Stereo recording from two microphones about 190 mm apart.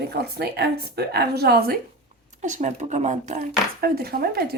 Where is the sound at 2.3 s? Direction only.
40° right (ahead or behind).